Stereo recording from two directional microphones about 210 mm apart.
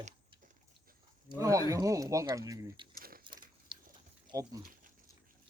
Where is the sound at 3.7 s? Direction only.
25° right (ahead or behind).